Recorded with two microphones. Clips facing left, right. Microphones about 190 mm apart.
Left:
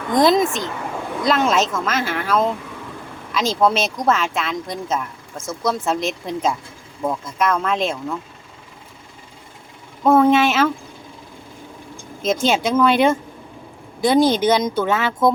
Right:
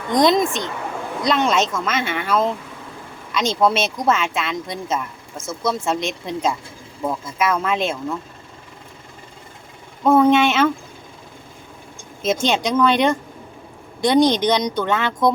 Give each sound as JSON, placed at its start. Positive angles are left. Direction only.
{"t": 0.1, "sound": "speech", "side_deg": 5}
{"t": 10.0, "sound": "speech", "side_deg": 0}
{"t": 12.2, "sound": "speech", "side_deg": 0}